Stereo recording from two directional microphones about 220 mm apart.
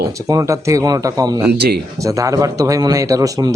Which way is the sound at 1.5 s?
45° right (ahead or behind).